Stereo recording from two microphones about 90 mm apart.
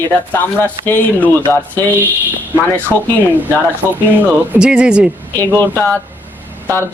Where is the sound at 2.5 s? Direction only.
25° right (ahead or behind).